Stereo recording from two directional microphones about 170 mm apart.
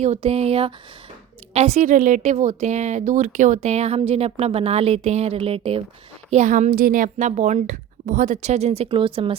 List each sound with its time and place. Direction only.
0.0 s a woman's voice: 40° right (ahead or behind)
6.3 s a woman's voice: 45° right (ahead or behind)
6.7 s a woman's voice: 55° right (ahead or behind); by 9.3 s 30° right (ahead or behind)